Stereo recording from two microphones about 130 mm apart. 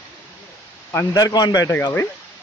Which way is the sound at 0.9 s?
20° left (ahead or behind).